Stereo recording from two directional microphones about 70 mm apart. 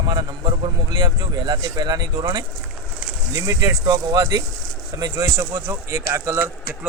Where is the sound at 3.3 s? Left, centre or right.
Right.